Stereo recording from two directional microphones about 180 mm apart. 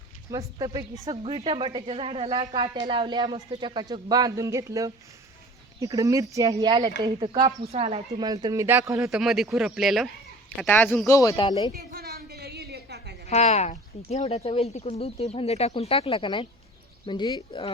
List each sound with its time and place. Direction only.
0.6 s speech: 25° right (ahead or behind)
7.6 s speech: 35° right (ahead or behind)
8.2 s speech: 20° right (ahead or behind)
9.1 s speech: centre (ahead or behind)
10.6 s speech: 10° left (ahead or behind); by 11.7 s 25° left (ahead or behind)
11.7 s a sound: 60° right (ahead or behind)
13.2 s speech: 35° left (ahead or behind)